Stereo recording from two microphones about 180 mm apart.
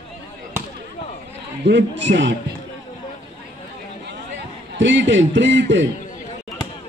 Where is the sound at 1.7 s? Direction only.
80° right.